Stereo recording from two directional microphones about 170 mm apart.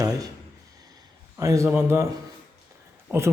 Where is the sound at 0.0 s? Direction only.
20° right (ahead or behind).